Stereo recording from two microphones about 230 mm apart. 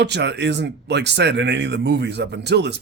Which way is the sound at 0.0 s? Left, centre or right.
Right.